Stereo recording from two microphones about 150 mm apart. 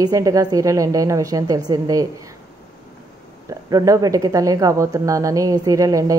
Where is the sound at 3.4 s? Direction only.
25° right (ahead or behind).